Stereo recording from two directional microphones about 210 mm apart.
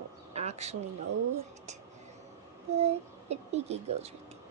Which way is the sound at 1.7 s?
35° right (ahead or behind).